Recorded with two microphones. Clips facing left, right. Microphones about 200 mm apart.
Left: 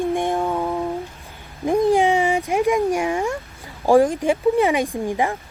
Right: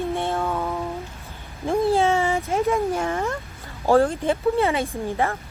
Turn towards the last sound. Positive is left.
turn(degrees=15)  # may be behind; listen again after turning